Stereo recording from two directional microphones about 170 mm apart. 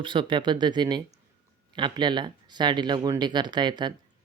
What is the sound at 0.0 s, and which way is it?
A woman's voice, 30° right (ahead or behind).